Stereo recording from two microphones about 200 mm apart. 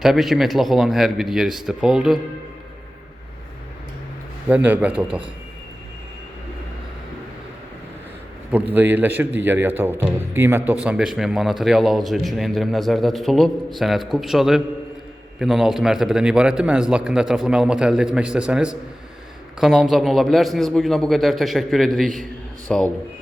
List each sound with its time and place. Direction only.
0.0 s a man's voice: centre (ahead or behind)
4.4 s speech: 5° right (ahead or behind)
8.7 s a man's voice: 10° right (ahead or behind)